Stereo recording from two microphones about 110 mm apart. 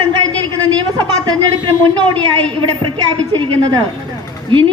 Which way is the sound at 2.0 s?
45° right (ahead or behind).